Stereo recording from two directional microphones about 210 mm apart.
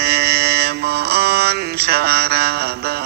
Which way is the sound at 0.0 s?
50° right (ahead or behind).